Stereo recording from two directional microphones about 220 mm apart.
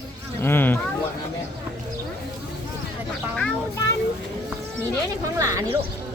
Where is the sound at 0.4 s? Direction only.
10° left (ahead or behind).